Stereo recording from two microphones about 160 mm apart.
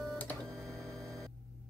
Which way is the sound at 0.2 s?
5° left (ahead or behind).